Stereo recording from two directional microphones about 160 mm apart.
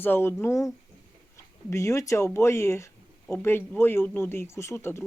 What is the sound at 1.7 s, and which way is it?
Speech, 20° left (ahead or behind).